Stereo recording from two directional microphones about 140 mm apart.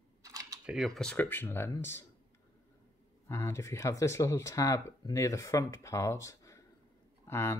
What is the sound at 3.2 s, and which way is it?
Speech, 20° left (ahead or behind).